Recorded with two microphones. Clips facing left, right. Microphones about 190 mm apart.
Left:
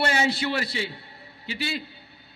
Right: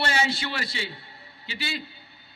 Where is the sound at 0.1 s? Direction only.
50° left (ahead or behind).